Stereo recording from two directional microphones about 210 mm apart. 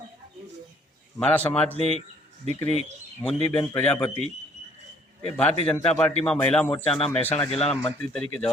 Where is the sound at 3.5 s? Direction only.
20° left (ahead or behind).